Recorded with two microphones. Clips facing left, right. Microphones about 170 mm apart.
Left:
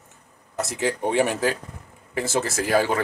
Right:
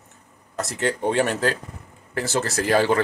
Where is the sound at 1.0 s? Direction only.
15° left (ahead or behind).